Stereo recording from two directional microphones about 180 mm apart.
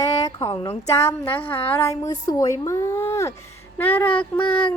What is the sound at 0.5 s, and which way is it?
Speech, 30° left (ahead or behind).